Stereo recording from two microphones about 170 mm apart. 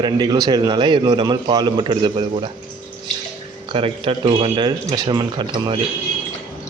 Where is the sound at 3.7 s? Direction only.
30° right (ahead or behind).